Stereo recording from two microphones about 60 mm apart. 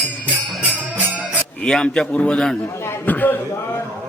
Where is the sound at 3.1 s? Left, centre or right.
Left.